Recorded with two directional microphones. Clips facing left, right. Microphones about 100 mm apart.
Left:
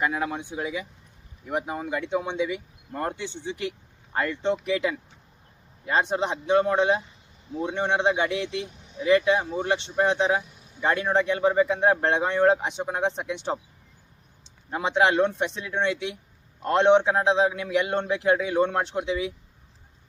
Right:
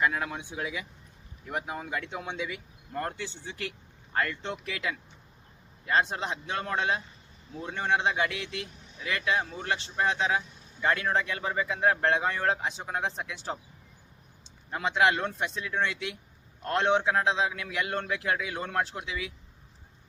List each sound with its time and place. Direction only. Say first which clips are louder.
0.0 s speech: left 2 dB; 15° left (ahead or behind)
14.7 s speech: left 3 dB; 20° left (ahead or behind)